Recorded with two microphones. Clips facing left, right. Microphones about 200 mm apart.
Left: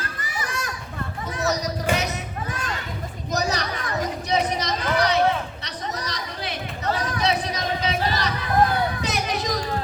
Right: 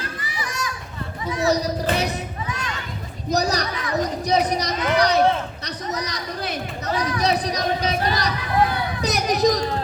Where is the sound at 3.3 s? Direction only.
35° right (ahead or behind).